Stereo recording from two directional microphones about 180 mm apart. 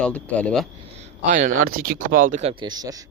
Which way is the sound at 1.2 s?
45° right (ahead or behind).